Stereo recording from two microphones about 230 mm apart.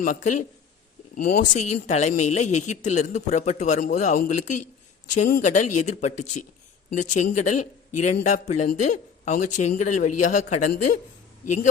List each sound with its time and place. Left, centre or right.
0.0 s a man's voice: left